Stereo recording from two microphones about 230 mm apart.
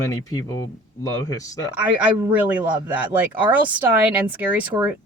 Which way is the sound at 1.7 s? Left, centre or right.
Centre.